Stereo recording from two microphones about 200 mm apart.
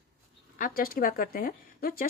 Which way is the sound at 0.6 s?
45° left (ahead or behind).